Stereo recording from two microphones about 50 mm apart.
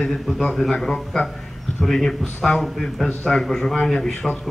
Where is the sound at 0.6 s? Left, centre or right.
Centre.